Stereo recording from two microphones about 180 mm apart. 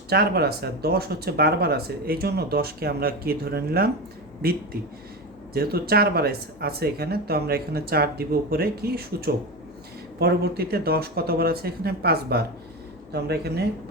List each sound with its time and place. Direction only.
0.1 s speech: 60° right (ahead or behind)
5.5 s speech: 60° right (ahead or behind)